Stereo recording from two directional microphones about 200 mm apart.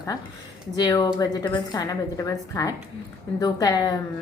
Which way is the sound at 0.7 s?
20° left (ahead or behind).